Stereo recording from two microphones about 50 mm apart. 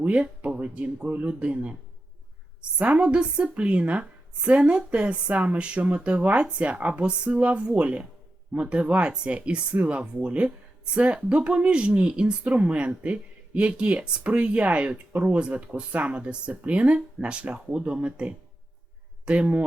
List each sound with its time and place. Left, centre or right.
0.0 s speech: right